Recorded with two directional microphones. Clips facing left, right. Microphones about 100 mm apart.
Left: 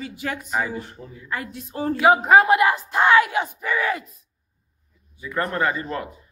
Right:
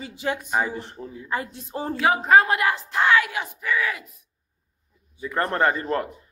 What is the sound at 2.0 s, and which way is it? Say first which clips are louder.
Speech: left 3 dB; 15° left (ahead or behind).